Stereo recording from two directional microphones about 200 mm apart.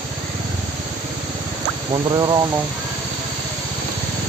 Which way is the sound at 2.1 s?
20° right (ahead or behind).